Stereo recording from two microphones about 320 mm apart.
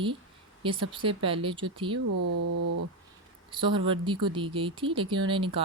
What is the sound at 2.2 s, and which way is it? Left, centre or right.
Speech, right.